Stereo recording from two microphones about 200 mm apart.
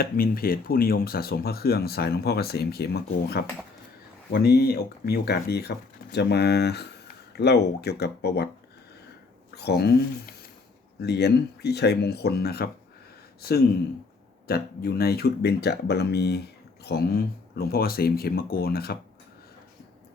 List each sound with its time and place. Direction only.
0.0 s speech: 50° left (ahead or behind)
9.6 s speech: 55° left (ahead or behind)
14.4 s speech: 50° left (ahead or behind)